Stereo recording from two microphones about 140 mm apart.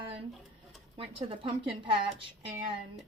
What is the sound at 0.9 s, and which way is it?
A woman's voice, 40° right (ahead or behind).